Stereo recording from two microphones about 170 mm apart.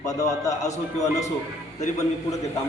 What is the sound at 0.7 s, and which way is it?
Speech, 40° left (ahead or behind).